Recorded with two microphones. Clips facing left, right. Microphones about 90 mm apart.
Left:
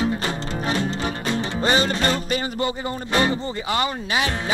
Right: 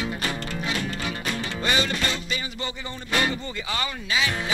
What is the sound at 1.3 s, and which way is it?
Music, 35° left (ahead or behind).